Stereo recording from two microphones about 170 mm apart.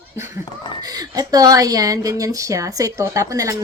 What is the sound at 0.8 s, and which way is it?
A woman's voice, 20° right (ahead or behind).